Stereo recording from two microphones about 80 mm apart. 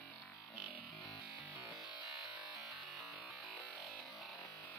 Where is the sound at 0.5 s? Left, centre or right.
Right.